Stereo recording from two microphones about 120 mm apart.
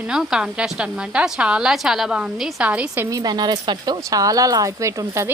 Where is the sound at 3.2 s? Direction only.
35° right (ahead or behind).